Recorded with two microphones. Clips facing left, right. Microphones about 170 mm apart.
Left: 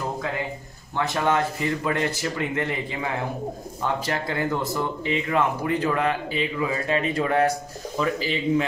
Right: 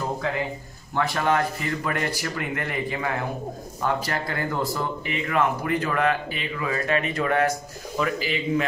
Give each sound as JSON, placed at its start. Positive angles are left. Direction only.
{"t": 0.9, "sound": "speech", "side_deg": 20}